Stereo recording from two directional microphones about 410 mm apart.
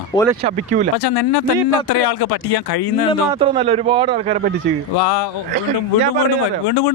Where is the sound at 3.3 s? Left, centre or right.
Centre.